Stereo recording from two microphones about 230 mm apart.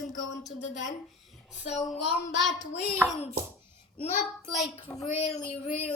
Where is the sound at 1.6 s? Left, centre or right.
Left.